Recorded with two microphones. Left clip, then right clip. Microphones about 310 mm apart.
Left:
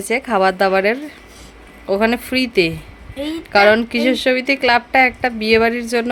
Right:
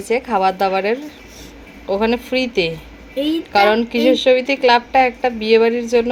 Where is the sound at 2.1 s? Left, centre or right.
Left.